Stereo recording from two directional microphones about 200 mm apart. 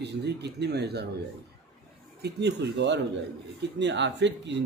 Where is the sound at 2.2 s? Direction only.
55° right (ahead or behind).